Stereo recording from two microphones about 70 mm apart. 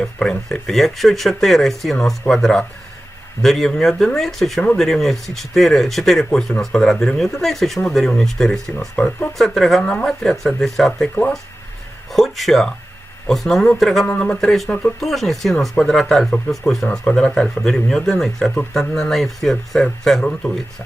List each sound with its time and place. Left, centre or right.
0.0 s speech: centre
12.1 s speech: centre
14.1 s speech: centre
14.4 s speech: centre
14.7 s speech: centre
15.0 s speech: centre